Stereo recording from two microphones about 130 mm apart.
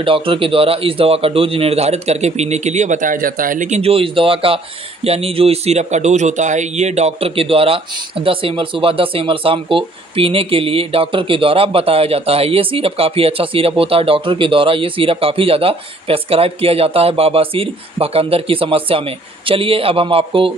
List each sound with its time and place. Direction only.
0.0 s a man's voice: 45° right (ahead or behind); by 3.8 s 75° right (ahead or behind)
3.8 s speech: 45° right (ahead or behind)